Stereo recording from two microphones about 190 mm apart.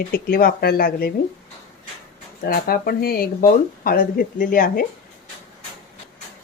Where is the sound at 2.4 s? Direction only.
50° left (ahead or behind).